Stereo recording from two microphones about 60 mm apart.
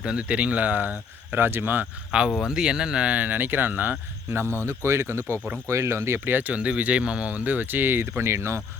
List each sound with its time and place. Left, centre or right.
0.0 s speech: centre; by 1.9 s right
2.4 s speech: centre; by 4.4 s right
4.6 s speech: right
6.5 s speech: right